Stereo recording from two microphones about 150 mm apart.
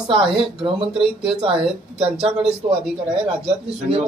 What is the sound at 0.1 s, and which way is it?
Speech, 35° right (ahead or behind).